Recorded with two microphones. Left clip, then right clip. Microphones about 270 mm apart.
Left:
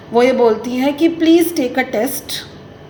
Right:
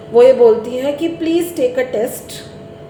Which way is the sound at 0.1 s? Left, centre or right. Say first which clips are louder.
Right 4 dB; left.